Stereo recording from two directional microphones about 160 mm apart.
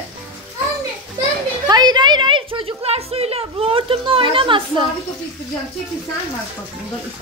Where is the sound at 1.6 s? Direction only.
25° right (ahead or behind).